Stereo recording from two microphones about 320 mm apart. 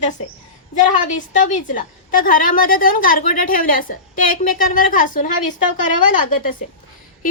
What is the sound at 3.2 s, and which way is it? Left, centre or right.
Speech, left.